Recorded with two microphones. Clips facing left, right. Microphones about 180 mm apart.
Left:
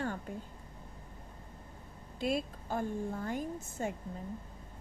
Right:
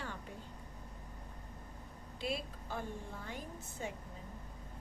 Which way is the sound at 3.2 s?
45° left (ahead or behind).